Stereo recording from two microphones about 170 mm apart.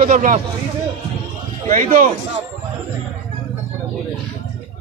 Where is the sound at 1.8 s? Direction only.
50° right (ahead or behind).